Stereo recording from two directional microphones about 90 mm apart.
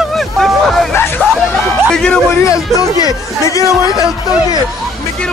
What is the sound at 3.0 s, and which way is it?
Speech, 40° left (ahead or behind).